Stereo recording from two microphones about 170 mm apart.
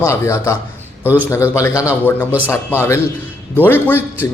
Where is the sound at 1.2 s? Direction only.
15° left (ahead or behind).